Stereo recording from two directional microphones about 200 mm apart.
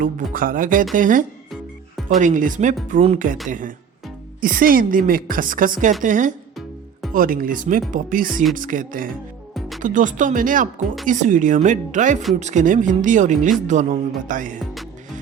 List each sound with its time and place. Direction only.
0.0 s a woman's voice: 45° right (ahead or behind)
4.4 s a woman's voice: 45° right (ahead or behind)
9.6 s music: centre (ahead or behind)
9.8 s speech: 40° right (ahead or behind)